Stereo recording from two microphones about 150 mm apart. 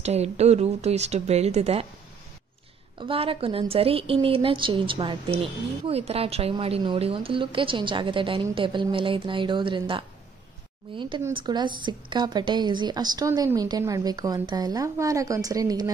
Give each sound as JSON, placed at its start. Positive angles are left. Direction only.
{"t": 0.0, "sound": "speech", "side_deg": -45}
{"t": 3.0, "sound": "a woman's voice", "side_deg": -35}